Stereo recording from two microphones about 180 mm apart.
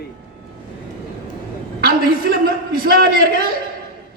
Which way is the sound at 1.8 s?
55° right (ahead or behind).